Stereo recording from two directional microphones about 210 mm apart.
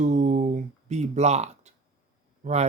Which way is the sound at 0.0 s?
35° right (ahead or behind).